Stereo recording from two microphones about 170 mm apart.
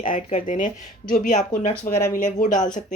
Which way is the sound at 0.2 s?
45° left (ahead or behind).